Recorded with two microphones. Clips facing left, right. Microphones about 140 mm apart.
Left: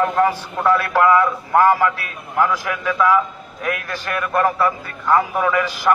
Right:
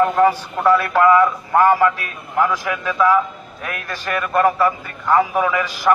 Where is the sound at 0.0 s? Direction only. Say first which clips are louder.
Right 3 dB; 5° right (ahead or behind).